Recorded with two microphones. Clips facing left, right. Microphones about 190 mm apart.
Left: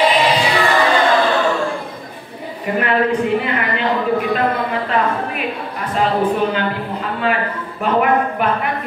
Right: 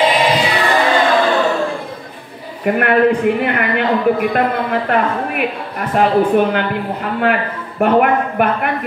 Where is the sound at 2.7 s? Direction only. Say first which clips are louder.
Right 4 dB; 60° right (ahead or behind).